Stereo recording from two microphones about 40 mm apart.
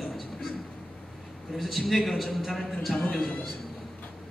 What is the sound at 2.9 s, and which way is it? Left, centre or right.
Speech, left.